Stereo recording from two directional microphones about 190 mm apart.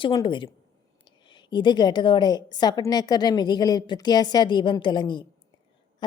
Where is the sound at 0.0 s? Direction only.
25° left (ahead or behind).